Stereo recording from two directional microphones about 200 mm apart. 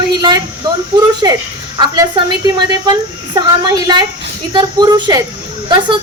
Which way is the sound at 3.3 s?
20° right (ahead or behind).